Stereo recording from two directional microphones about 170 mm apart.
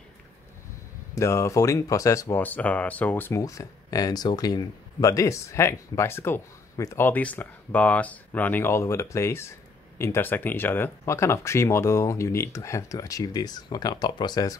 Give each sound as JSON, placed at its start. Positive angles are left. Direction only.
{"t": 1.1, "sound": "speech", "side_deg": 15}